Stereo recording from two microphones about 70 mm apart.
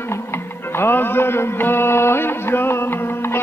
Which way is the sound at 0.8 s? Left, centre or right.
Left.